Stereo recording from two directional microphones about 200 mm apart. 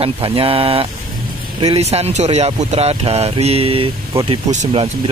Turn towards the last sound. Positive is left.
turn(degrees=-30)  # may be behind; listen again after turning